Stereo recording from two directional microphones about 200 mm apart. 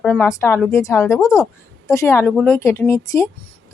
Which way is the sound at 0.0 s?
10° left (ahead or behind).